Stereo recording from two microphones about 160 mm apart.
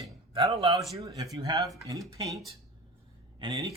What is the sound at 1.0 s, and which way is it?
A man's voice, 20° right (ahead or behind).